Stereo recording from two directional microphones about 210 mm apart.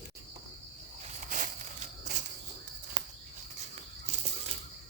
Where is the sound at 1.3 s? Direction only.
35° right (ahead or behind).